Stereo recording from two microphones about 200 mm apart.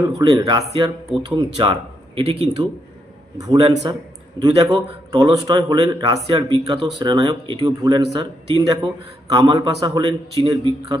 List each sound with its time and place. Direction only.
0.2 s a man's voice: 20° right (ahead or behind)
3.3 s a man's voice: 20° right (ahead or behind)